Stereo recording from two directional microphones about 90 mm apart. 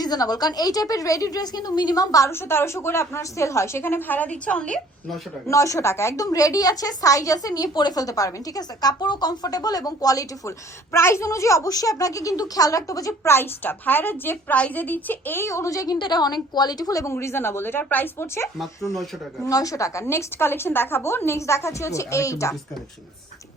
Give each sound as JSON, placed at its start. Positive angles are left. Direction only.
{"t": 0.0, "sound": "a woman's voice", "side_deg": 45}
{"t": 2.3, "sound": "a woman's voice", "side_deg": 25}
{"t": 5.5, "sound": "a woman's voice", "side_deg": 35}
{"t": 10.9, "sound": "a woman's voice", "side_deg": 30}
{"t": 16.0, "sound": "a woman's voice", "side_deg": 55}
{"t": 18.6, "sound": "speech", "side_deg": 0}
{"t": 19.5, "sound": "a woman's voice", "side_deg": 40}